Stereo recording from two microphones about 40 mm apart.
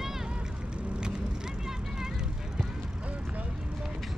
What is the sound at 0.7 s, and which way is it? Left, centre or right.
Vehicle, centre.